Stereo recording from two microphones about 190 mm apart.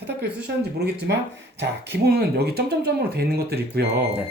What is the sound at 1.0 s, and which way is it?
Speech, 65° right (ahead or behind).